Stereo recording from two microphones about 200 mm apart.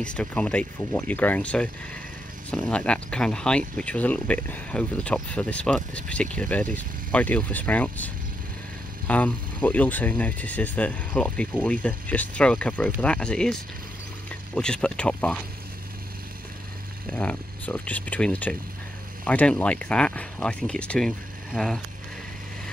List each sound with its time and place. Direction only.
0.0 s speech: 5° left (ahead or behind)
17.1 s speech: 5° left (ahead or behind)